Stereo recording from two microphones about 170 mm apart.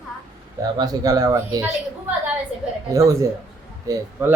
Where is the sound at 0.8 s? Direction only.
20° right (ahead or behind).